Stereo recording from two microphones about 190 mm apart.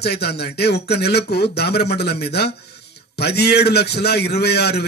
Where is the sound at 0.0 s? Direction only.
60° left (ahead or behind).